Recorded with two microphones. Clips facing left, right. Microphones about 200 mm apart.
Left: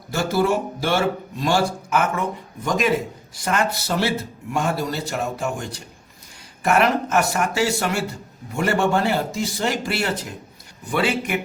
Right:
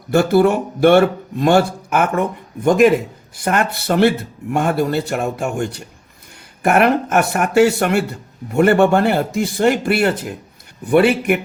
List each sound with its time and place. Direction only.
0.1 s speech: 60° right (ahead or behind)